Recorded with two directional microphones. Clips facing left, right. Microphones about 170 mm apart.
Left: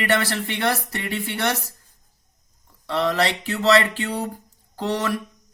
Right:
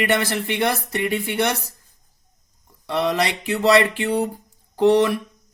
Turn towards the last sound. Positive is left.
turn(degrees=-20)  # may be behind; listen again after turning